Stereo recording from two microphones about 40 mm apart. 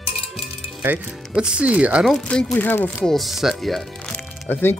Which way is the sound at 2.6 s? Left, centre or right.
Left.